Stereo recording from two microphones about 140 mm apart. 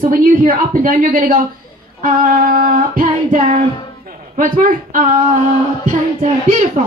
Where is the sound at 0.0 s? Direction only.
85° right.